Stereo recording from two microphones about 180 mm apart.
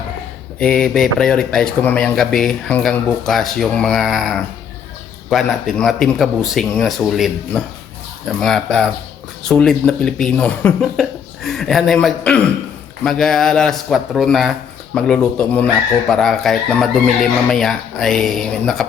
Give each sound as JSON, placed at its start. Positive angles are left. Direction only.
{"t": 0.6, "sound": "speech", "side_deg": 5}